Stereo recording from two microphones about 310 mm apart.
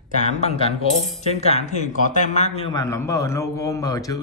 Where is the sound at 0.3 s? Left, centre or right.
Centre.